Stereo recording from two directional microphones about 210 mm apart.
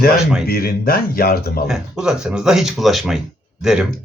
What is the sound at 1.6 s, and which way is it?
Speech, 5° right (ahead or behind).